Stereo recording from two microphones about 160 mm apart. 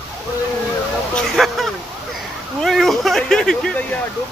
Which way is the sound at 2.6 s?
Centre (ahead or behind).